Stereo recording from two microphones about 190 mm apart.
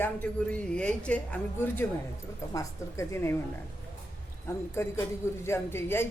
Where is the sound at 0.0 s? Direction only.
10° left (ahead or behind).